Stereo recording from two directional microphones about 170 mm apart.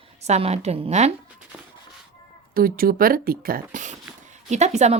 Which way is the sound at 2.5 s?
60° right (ahead or behind).